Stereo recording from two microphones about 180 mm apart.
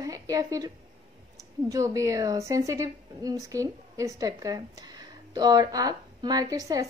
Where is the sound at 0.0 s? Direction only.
20° right (ahead or behind).